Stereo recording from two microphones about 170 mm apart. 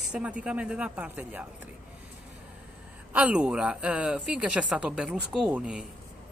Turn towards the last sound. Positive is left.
turn(degrees=-5)  # may be behind; listen again after turning